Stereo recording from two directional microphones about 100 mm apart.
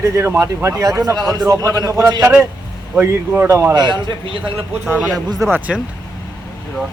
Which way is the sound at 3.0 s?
20° right (ahead or behind).